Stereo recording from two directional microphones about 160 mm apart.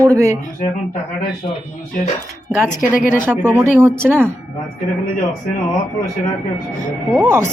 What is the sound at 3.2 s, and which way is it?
Speech, 10° right (ahead or behind).